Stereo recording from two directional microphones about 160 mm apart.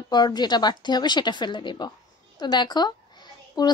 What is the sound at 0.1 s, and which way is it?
A child's voice, 25° left (ahead or behind).